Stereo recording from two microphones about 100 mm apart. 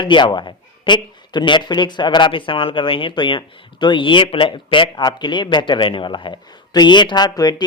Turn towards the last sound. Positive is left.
turn(degrees=45)  # may be behind; listen again after turning